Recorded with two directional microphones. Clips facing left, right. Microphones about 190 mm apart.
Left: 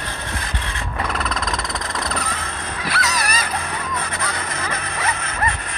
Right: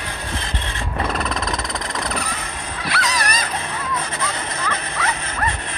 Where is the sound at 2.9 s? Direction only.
5° left (ahead or behind).